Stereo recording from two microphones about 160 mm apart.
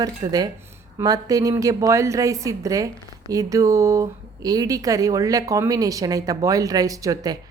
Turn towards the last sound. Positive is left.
turn(degrees=-25)  # may be behind; listen again after turning